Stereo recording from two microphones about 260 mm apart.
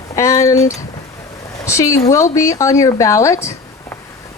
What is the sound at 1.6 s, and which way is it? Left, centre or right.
Speech, centre.